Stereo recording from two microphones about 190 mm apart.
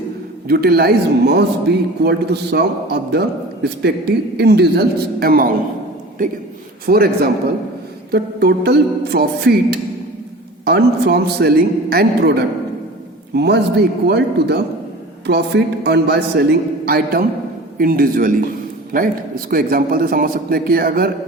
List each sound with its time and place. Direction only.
0.4 s a man's voice: 55° right (ahead or behind)
6.8 s a man's voice: 55° right (ahead or behind)